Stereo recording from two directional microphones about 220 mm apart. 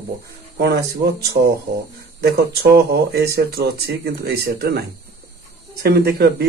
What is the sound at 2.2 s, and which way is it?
Speech, 45° right (ahead or behind).